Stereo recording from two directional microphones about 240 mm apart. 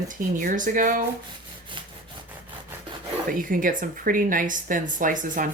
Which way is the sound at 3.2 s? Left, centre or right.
Right.